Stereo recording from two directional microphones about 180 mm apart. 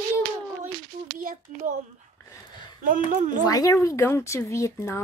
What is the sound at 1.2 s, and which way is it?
Speech, 45° right (ahead or behind).